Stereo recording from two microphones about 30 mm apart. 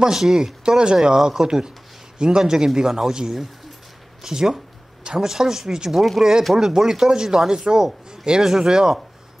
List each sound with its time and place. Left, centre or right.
0.0 s speech: centre
0.7 s a man's voice: right
4.2 s a man's voice: centre
5.9 s speech: centre
6.6 s a man's voice: centre